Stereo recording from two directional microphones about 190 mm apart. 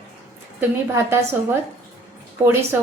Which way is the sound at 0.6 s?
15° right (ahead or behind).